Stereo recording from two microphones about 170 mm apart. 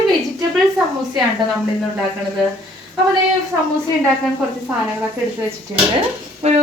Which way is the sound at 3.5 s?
15° right (ahead or behind).